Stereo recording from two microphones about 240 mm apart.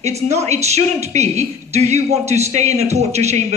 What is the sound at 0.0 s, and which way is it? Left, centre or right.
Speech, right.